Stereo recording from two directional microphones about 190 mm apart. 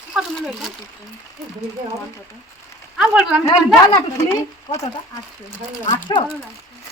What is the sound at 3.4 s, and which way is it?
A woman's voice, 20° left (ahead or behind).